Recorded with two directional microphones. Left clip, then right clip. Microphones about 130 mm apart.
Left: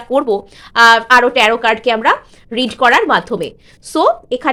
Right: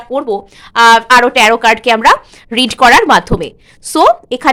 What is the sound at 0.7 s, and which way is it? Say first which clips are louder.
A woman's voice: right 2 dB; 10° right (ahead or behind).